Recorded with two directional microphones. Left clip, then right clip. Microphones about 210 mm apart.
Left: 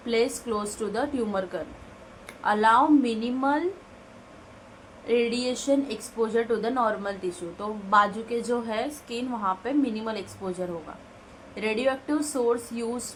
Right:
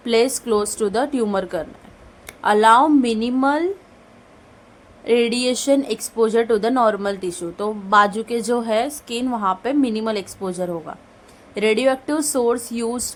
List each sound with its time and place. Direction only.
0.0 s speech: 55° right (ahead or behind)
5.0 s speech: 55° right (ahead or behind)